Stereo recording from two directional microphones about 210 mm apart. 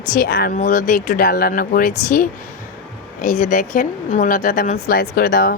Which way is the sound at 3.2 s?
40° left (ahead or behind).